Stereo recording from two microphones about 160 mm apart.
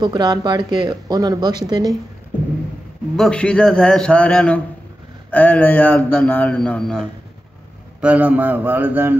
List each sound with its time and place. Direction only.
0.0 s speech: 25° right (ahead or behind)
3.2 s a man's voice: 5° left (ahead or behind)
8.0 s a man's voice: 10° right (ahead or behind)